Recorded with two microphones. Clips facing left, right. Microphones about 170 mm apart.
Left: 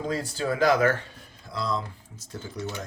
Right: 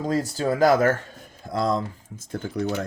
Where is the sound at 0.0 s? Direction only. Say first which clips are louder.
Right 5 dB; 40° right (ahead or behind).